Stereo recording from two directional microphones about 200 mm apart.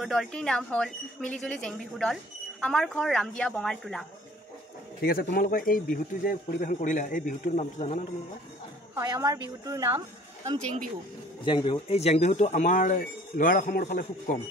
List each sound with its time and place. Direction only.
0.0 s speech: centre (ahead or behind)
5.0 s a man's voice: 45° left (ahead or behind)
8.9 s a woman's voice: 15° right (ahead or behind)
11.4 s speech: 25° left (ahead or behind); by 14.4 s 40° left (ahead or behind)